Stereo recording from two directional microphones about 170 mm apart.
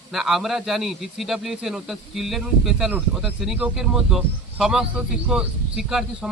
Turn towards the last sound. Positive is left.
turn(degrees=-5)  # may be behind; listen again after turning